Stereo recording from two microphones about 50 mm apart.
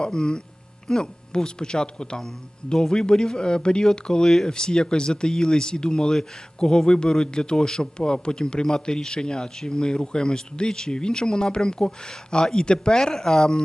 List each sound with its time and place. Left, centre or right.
0.0 s speech: centre